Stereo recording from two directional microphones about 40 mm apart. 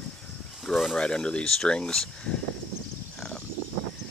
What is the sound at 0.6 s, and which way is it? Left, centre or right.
Speech, centre.